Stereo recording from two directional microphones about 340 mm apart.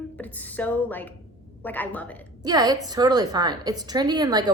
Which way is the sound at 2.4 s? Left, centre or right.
Centre.